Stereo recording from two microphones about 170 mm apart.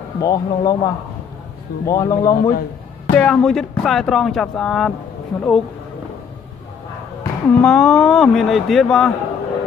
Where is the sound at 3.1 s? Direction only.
5° left (ahead or behind).